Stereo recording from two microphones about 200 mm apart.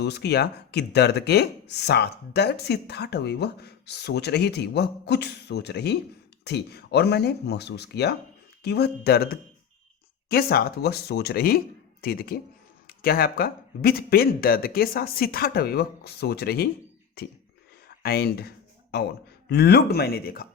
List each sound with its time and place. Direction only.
0.0 s speech: 55° left (ahead or behind)
17.8 s a sound: 50° left (ahead or behind)
19.5 s speech: 55° left (ahead or behind)